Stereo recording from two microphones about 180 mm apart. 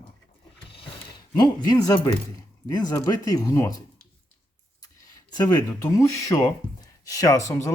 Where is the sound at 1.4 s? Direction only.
20° left (ahead or behind).